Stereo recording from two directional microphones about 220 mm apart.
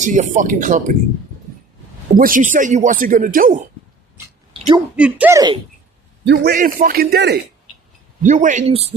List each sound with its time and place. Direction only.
0.0 s speech: 35° right (ahead or behind)
2.1 s speech: 40° right (ahead or behind)
4.9 s speech: 5° right (ahead or behind)
6.2 s a man's voice: 50° right (ahead or behind)
8.2 s speech: 35° right (ahead or behind)